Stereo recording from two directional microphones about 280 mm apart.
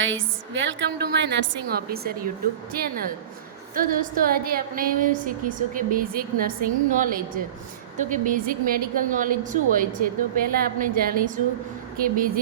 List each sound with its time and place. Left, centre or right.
0.0 s a woman's voice: right